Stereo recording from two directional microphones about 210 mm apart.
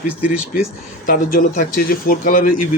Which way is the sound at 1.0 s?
40° left (ahead or behind).